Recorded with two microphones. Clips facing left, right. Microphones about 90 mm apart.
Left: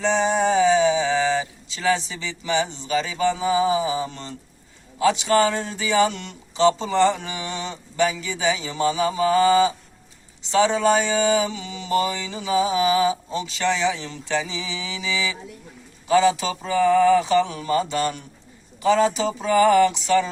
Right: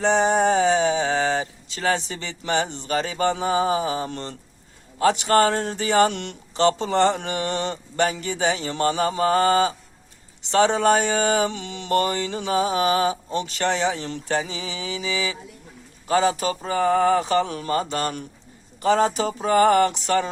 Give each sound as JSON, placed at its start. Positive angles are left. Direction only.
{"t": 0.0, "sound": "speech", "side_deg": -55}
{"t": 10.5, "sound": "mantra", "side_deg": -55}
{"t": 16.0, "sound": "a man's voice", "side_deg": -45}
{"t": 16.4, "sound": "mantra", "side_deg": -45}